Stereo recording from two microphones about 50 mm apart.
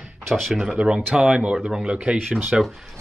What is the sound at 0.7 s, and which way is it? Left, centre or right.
Speech, right.